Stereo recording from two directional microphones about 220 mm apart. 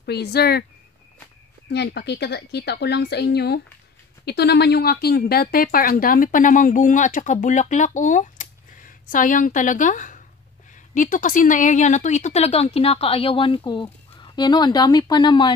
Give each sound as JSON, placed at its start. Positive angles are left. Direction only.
{"t": 0.0, "sound": "a woman's voice", "side_deg": 50}
{"t": 1.7, "sound": "a woman's voice", "side_deg": 50}